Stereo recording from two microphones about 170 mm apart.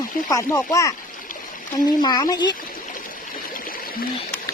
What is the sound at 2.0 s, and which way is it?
Speech, 25° left (ahead or behind).